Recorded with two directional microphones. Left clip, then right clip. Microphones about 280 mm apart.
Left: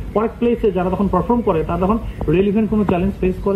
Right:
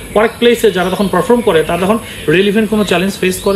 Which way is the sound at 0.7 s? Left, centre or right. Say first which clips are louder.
Right 5 dB; right.